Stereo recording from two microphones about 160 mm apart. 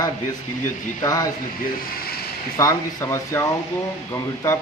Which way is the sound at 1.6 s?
70° left (ahead or behind).